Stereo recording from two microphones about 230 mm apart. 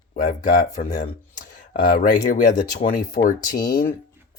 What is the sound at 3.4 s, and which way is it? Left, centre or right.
Speech, centre.